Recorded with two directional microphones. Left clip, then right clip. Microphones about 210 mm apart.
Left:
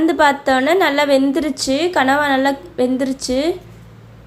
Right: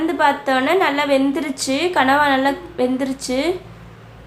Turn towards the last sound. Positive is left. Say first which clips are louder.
# left 2 dB
turn(degrees=20)  # may be behind; listen again after turning